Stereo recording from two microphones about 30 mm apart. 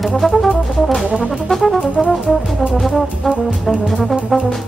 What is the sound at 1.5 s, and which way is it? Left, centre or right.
Brass instrument, centre.